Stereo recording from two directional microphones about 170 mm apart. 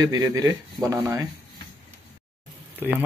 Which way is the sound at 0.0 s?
20° right (ahead or behind).